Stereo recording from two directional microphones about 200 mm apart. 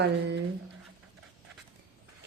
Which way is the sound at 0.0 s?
55° right (ahead or behind).